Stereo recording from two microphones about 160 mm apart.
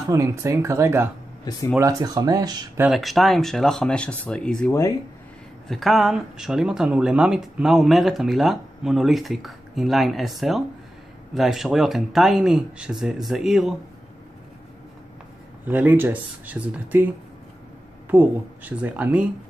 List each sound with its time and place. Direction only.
0.1 s speech: 20° right (ahead or behind)
2.8 s speech: centre (ahead or behind)
15.6 s speech: 10° right (ahead or behind)
18.1 s speech: 10° right (ahead or behind)